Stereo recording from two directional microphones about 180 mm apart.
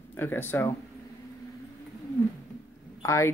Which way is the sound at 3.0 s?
15° left (ahead or behind).